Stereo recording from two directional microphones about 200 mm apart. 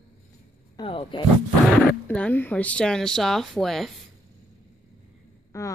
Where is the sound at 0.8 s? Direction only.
25° left (ahead or behind).